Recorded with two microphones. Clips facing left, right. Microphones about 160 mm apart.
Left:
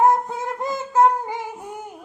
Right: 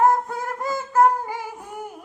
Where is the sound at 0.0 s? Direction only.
20° left (ahead or behind).